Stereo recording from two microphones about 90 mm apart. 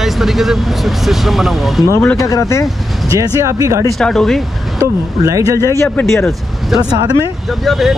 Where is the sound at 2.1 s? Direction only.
35° left (ahead or behind).